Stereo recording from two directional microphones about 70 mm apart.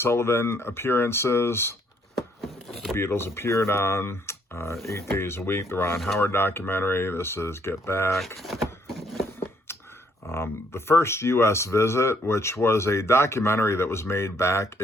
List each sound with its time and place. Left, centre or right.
0.0 s speech: left
2.9 s speech: left
8.4 s speech: centre
10.2 s speech: left